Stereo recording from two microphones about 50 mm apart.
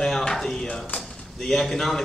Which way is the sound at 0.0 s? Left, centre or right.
Centre.